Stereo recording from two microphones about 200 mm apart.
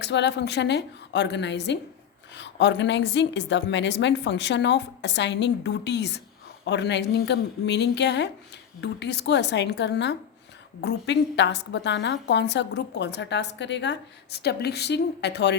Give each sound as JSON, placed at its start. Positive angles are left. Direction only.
{"t": 0.0, "sound": "a woman's voice", "side_deg": 60}